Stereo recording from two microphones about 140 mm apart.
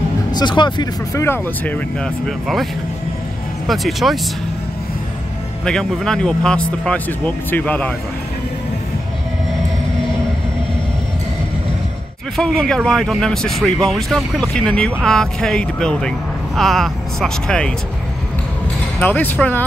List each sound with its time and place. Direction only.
0.3 s speech: 30° left (ahead or behind)
1.2 s speech: 15° left (ahead or behind)
5.7 s speech: 5° left (ahead or behind)
12.4 s speech: 5° left (ahead or behind)
18.9 s speech: 10° left (ahead or behind)